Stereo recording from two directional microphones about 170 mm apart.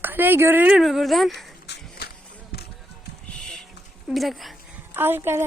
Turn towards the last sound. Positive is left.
turn(degrees=-15)  # may be behind; listen again after turning